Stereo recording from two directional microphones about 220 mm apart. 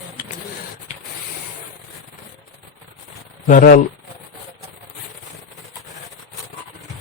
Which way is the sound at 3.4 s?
40° left (ahead or behind).